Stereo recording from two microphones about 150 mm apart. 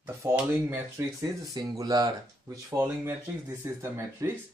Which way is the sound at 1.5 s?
25° right (ahead or behind).